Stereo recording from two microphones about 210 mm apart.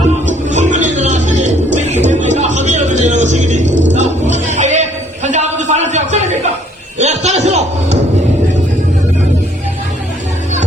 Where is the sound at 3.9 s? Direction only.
35° right (ahead or behind).